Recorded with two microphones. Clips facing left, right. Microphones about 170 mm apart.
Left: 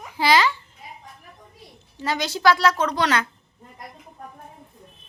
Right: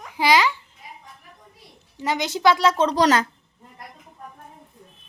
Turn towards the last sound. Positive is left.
turn(degrees=-40)  # may be behind; listen again after turning